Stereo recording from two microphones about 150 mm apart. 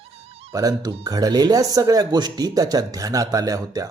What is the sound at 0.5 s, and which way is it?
Speech, 25° right (ahead or behind).